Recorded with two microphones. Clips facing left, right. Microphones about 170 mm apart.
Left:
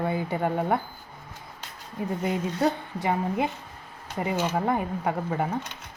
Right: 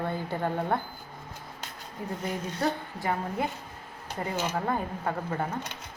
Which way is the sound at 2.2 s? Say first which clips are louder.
Left 5 dB; 20° left (ahead or behind).